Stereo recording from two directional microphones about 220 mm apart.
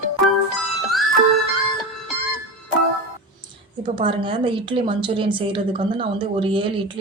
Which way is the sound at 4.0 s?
25° right (ahead or behind).